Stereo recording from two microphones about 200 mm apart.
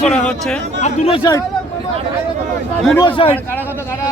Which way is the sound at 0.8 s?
30° left (ahead or behind).